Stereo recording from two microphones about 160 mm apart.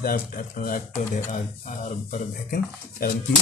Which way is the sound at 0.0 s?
60° left (ahead or behind).